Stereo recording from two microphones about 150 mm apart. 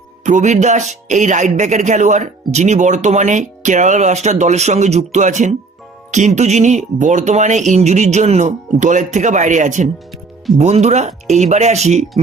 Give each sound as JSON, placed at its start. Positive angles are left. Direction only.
{"t": 0.3, "sound": "speech", "side_deg": -50}